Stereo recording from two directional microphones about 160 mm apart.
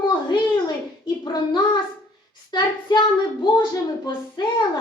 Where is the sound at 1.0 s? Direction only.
30° left (ahead or behind).